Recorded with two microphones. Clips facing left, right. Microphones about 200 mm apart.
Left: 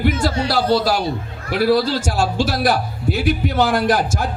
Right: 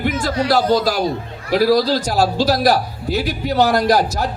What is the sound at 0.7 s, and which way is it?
A man's voice, 45° right (ahead or behind).